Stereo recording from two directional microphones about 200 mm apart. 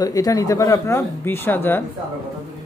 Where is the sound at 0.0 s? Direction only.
15° left (ahead or behind).